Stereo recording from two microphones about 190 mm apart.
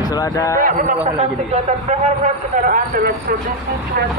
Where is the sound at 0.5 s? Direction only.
45° right (ahead or behind).